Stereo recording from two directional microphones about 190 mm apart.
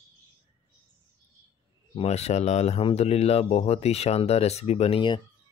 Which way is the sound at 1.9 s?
35° left (ahead or behind).